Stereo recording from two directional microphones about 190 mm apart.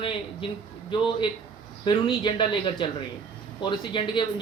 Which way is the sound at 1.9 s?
25° left (ahead or behind).